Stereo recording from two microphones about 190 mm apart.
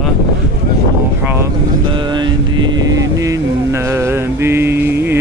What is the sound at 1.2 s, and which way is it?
Vehicle, 10° right (ahead or behind).